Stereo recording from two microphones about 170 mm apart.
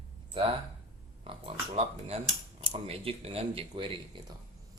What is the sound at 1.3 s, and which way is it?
Speech, 30° right (ahead or behind).